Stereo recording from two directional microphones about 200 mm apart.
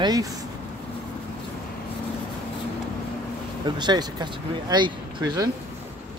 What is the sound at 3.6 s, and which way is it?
Speech, 20° right (ahead or behind).